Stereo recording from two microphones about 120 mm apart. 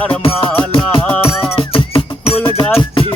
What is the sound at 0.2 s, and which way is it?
Music, 50° left (ahead or behind).